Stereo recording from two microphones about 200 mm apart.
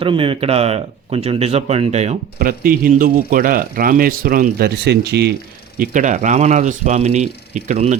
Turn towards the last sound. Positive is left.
turn(degrees=-35)  # may be behind; listen again after turning